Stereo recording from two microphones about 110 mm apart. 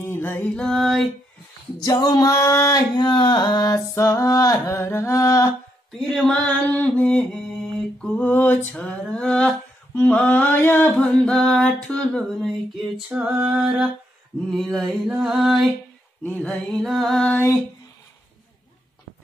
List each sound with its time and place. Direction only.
0.0 s mantra: 20° left (ahead or behind)
0.6 s music: 5° left (ahead or behind)
1.8 s female singing: 40° left (ahead or behind)
3.0 s a sound: 45° left (ahead or behind)
3.7 s a sound: 30° left (ahead or behind)
5.9 s music: centre (ahead or behind)
6.3 s mantra: 15° left (ahead or behind)
13.1 s female singing: 10° right (ahead or behind)
14.5 s music: centre (ahead or behind)
16.3 s mantra: 10° left (ahead or behind)
16.8 s music: centre (ahead or behind)